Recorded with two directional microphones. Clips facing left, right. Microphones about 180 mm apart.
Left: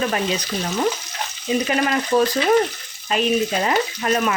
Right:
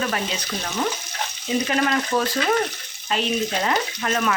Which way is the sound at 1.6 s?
20° left (ahead or behind).